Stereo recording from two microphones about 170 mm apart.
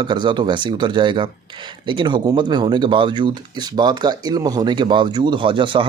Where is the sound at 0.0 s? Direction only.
25° right (ahead or behind).